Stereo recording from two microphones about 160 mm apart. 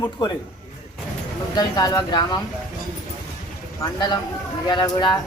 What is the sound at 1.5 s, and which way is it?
Speech, 25° left (ahead or behind).